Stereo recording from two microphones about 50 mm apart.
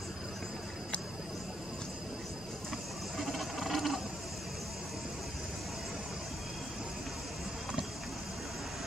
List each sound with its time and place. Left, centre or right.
3.2 s sewing machine: centre